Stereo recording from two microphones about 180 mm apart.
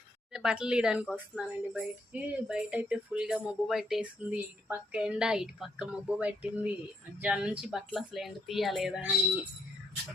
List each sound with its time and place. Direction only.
0.3 s speech: 5° right (ahead or behind)